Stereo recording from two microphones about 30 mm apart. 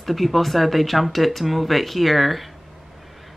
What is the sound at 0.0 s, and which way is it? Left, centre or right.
Speech, centre.